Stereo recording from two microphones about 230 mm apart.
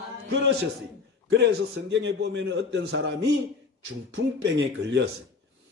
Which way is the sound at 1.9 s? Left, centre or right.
Right.